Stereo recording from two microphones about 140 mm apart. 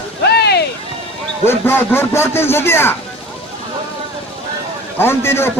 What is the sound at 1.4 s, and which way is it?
A man's voice, 15° left (ahead or behind).